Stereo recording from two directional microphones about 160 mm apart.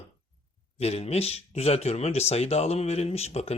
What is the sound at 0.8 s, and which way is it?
Speech, 40° left (ahead or behind).